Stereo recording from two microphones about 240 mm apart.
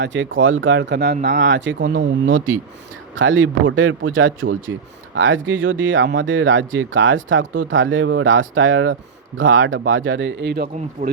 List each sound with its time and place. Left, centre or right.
0.0 s speech: right